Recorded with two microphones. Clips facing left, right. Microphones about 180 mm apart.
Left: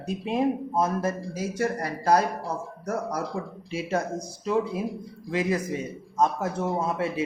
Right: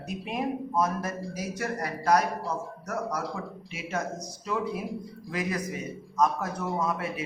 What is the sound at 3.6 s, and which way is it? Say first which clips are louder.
A man's voice: left 6 dB; 30° left (ahead or behind).